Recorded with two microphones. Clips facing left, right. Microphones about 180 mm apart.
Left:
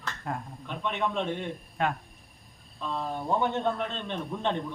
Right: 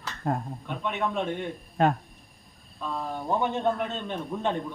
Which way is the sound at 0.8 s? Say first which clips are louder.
Right 1 dB; 5° right (ahead or behind).